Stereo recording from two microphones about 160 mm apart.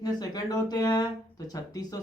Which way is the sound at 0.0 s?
25° left (ahead or behind).